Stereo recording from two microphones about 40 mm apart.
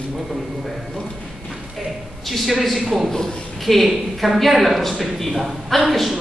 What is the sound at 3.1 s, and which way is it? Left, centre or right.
Speech, centre.